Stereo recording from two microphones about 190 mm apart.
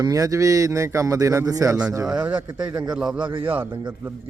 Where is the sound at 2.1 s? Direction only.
5° right (ahead or behind).